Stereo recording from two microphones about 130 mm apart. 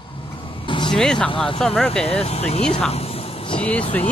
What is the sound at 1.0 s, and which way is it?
Speech, 5° left (ahead or behind).